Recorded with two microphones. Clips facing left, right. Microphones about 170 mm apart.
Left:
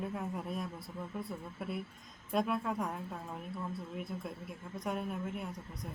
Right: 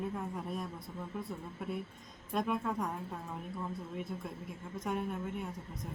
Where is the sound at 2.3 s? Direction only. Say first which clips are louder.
Left 1 dB; centre (ahead or behind).